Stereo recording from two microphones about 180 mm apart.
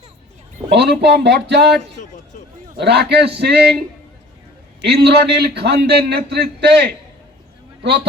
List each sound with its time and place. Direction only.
0.7 s a man's voice: 65° right (ahead or behind)
4.8 s a man's voice: 65° right (ahead or behind)